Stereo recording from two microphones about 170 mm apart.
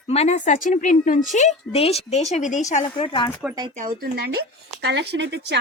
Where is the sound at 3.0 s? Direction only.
30° left (ahead or behind).